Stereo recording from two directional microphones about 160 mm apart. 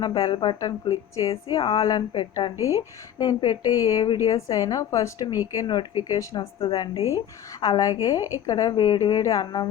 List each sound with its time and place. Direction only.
0.0 s a woman's voice: 35° left (ahead or behind)
6.9 s speech: 20° right (ahead or behind)
7.6 s a woman's voice: 25° left (ahead or behind)